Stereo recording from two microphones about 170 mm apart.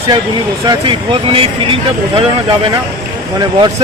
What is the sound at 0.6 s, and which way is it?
Speech, 25° right (ahead or behind).